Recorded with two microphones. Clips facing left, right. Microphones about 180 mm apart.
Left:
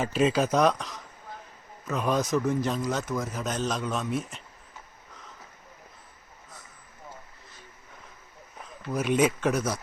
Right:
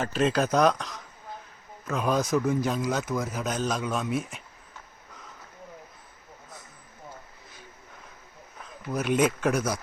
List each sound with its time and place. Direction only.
0.0 s speech: 5° left (ahead or behind)
8.9 s speech: 5° left (ahead or behind)